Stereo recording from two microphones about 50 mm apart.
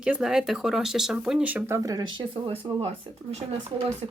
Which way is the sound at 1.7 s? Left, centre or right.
Right.